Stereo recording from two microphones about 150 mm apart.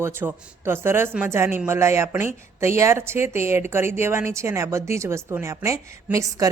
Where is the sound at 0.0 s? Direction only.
15° right (ahead or behind).